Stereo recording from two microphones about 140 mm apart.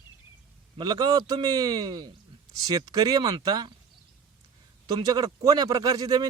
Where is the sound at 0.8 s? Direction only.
30° right (ahead or behind).